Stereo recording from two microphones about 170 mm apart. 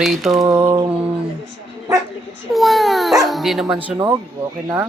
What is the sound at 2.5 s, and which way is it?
Speech, centre (ahead or behind).